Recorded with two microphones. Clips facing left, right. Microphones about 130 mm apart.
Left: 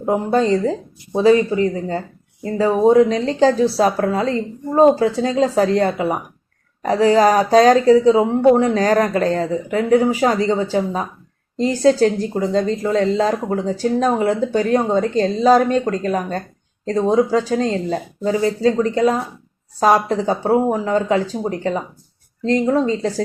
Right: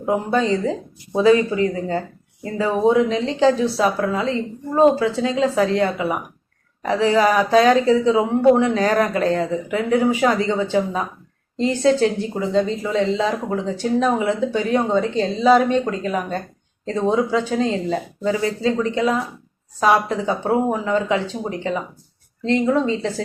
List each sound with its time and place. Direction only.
0.0 s speech: 35° left (ahead or behind)